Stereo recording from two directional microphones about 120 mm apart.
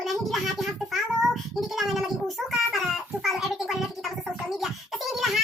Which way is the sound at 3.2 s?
5° right (ahead or behind).